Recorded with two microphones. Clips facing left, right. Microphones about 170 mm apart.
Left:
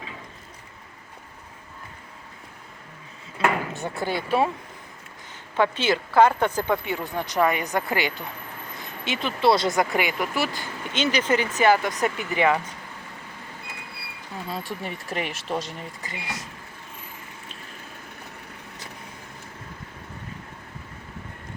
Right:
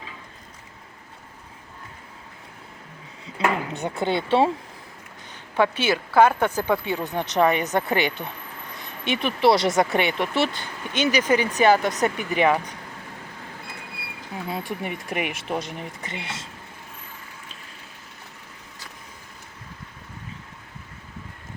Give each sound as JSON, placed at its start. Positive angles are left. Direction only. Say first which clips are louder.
{"t": 3.2, "sound": "speech", "louder": "even", "side_deg": -20}
{"t": 5.5, "sound": "speech", "louder": "right 1 dB", "side_deg": -10}
{"t": 6.9, "sound": "speech", "louder": "right 2 dB", "side_deg": -20}
{"t": 14.7, "sound": "speech", "louder": "right 2 dB", "side_deg": -15}